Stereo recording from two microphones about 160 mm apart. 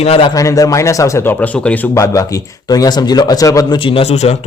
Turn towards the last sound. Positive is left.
turn(degrees=40)  # may be behind; listen again after turning